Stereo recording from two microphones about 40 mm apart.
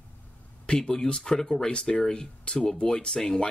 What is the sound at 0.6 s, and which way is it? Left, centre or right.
Speech, centre.